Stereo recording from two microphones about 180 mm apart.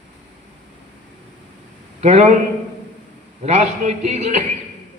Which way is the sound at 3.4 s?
40° right (ahead or behind).